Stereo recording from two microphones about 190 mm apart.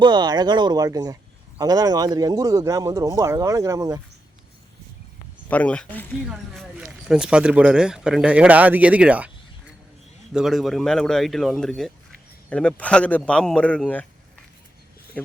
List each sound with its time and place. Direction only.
0.0 s a man's voice: 20° right (ahead or behind)
5.5 s speech: 5° left (ahead or behind)